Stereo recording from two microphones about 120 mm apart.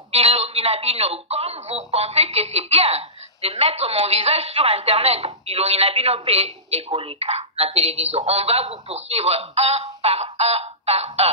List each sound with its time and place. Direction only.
0.1 s a woman's voice: 60° right (ahead or behind)